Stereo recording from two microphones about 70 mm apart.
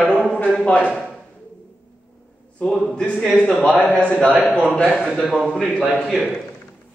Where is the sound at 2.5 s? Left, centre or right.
Centre.